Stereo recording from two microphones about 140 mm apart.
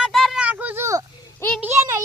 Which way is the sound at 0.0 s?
Centre (ahead or behind).